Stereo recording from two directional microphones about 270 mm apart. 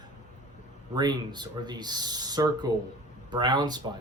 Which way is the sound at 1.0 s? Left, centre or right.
Centre.